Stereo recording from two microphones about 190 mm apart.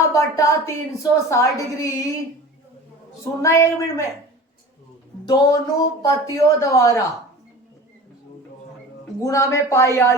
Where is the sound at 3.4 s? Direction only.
15° left (ahead or behind).